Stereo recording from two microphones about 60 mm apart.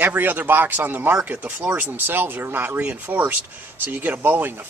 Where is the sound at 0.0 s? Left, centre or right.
Right.